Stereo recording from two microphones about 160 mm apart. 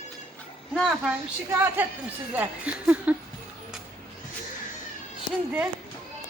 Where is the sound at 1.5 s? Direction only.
15° right (ahead or behind).